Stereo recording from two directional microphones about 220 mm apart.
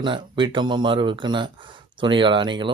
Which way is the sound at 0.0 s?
20° right (ahead or behind).